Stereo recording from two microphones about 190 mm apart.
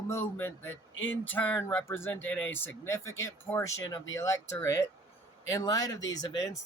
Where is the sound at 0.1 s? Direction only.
10° left (ahead or behind).